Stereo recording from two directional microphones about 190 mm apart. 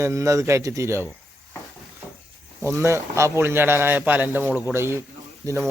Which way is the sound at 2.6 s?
15° right (ahead or behind).